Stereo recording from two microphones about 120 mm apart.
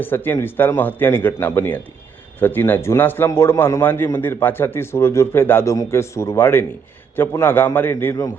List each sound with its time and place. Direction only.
0.0 s a man's voice: 15° left (ahead or behind)